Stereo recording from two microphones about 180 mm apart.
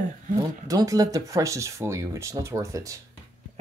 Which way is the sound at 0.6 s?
20° right (ahead or behind).